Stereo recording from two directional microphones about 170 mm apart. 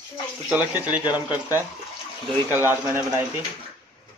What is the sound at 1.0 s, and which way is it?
Speech, 25° left (ahead or behind).